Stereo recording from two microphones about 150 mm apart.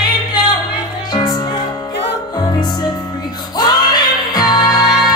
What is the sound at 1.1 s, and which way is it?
Music, 30° left (ahead or behind).